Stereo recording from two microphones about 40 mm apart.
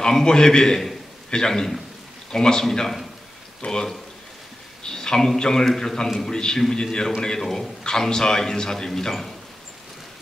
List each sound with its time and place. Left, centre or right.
0.0 s a man's voice: centre
3.6 s speech: left
4.8 s a man's voice: centre
6.3 s a man's voice: centre